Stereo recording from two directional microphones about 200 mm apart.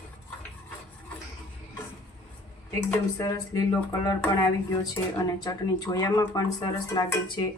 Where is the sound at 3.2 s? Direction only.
15° left (ahead or behind).